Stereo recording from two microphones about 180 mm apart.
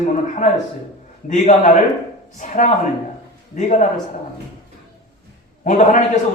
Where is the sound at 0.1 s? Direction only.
40° left (ahead or behind).